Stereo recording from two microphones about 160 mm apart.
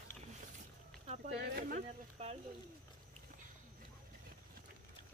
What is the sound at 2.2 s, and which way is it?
Speech, 40° right (ahead or behind).